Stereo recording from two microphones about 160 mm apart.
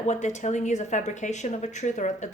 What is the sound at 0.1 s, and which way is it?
Speech, 45° left (ahead or behind).